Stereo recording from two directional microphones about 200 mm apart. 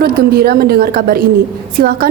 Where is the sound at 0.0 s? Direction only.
50° right (ahead or behind).